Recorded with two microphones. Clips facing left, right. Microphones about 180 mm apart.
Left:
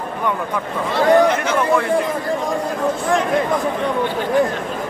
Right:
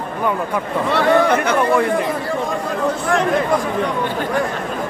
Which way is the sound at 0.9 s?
60° right (ahead or behind).